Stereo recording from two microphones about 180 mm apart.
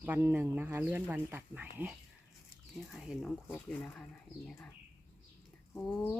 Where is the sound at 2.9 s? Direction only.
Centre (ahead or behind).